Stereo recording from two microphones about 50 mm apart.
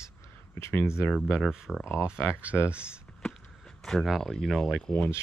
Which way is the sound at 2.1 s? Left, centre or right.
Left.